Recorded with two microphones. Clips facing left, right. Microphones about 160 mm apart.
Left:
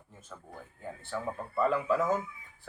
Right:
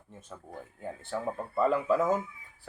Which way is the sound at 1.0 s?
20° right (ahead or behind).